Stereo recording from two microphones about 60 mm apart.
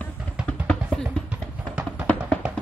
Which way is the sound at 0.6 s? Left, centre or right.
Centre.